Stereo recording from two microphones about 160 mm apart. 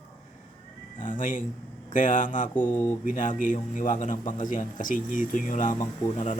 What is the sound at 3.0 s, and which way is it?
A man's voice, 55° left (ahead or behind).